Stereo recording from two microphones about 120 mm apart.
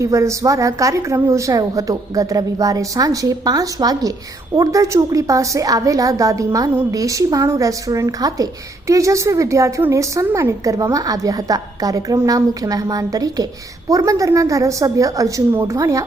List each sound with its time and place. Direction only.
0.0 s a woman's voice: 25° right (ahead or behind)